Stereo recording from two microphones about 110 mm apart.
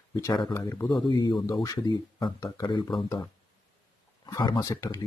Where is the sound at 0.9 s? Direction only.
40° left (ahead or behind).